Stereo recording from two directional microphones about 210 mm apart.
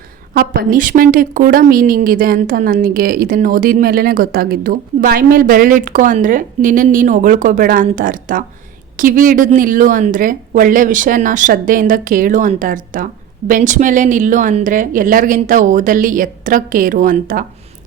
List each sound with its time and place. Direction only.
0.3 s a woman's voice: 45° right (ahead or behind)